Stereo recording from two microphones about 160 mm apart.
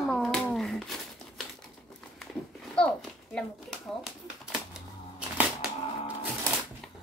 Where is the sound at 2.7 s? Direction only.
5° left (ahead or behind).